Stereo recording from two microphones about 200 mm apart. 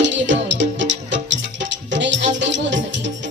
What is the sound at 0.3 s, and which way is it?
Music, 65° right (ahead or behind).